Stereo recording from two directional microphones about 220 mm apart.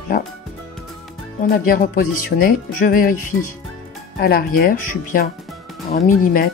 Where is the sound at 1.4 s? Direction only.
40° left (ahead or behind).